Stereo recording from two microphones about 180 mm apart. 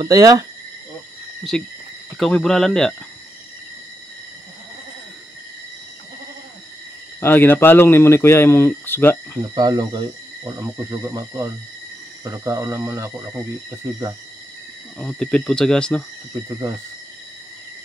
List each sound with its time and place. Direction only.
0.0 s speech: 20° right (ahead or behind)
1.5 s speech: 5° left (ahead or behind)
7.2 s speech: 10° left (ahead or behind)
9.6 s speech: 20° right (ahead or behind)
15.0 s speech: 5° left (ahead or behind)
16.3 s speech: 15° right (ahead or behind)